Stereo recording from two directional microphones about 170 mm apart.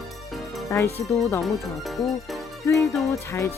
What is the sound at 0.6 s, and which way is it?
Speech, 15° left (ahead or behind).